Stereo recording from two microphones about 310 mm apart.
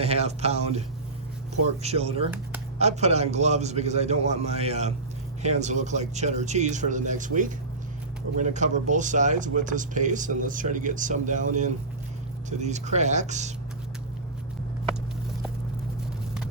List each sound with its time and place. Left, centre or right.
0.0 s speech: centre